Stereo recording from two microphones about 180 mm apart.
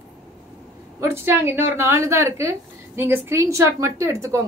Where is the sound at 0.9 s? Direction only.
15° right (ahead or behind).